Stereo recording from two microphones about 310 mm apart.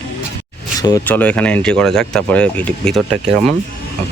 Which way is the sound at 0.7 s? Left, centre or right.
Centre.